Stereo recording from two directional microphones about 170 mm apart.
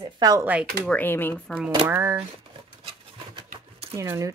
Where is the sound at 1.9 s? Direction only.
15° right (ahead or behind).